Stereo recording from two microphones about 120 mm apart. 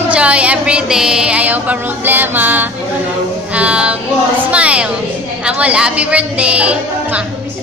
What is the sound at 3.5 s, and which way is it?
Music, 10° right (ahead or behind).